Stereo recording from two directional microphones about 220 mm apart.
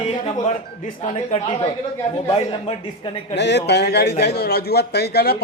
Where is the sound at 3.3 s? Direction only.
50° left (ahead or behind).